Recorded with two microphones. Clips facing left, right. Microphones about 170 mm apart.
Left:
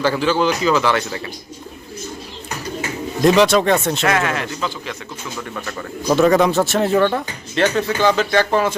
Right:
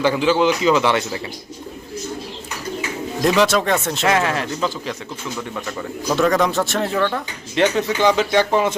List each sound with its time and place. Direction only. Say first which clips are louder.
0.0 s speech: right 1 dB; 15° right (ahead or behind)
3.2 s speech: left 4 dB; centre (ahead or behind)
4.0 s speech: even; 25° right (ahead or behind)
6.1 s speech: left 4 dB; 5° left (ahead or behind)
7.5 s speech: even; 15° right (ahead or behind)